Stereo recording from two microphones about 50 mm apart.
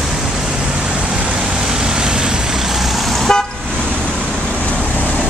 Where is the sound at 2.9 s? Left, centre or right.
Centre.